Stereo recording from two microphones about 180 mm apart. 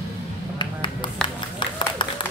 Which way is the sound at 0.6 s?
25° left (ahead or behind).